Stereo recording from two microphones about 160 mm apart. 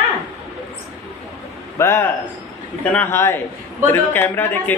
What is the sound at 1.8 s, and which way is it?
Speech, 15° left (ahead or behind).